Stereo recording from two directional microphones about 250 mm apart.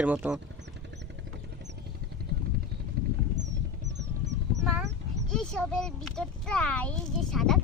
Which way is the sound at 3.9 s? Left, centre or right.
Right.